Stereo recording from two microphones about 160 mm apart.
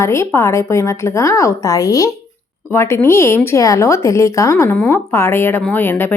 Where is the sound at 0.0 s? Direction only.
15° left (ahead or behind).